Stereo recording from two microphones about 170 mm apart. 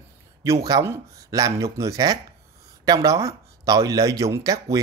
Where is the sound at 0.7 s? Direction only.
20° right (ahead or behind).